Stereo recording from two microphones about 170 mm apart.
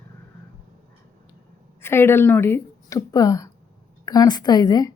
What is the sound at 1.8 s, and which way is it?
A woman's voice, 15° left (ahead or behind).